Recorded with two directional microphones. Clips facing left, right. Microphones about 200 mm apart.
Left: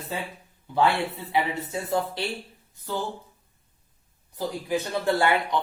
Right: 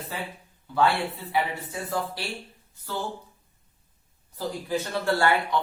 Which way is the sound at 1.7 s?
25° left (ahead or behind).